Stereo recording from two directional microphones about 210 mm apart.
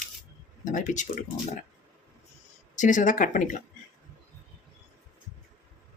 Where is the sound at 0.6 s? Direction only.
40° left (ahead or behind).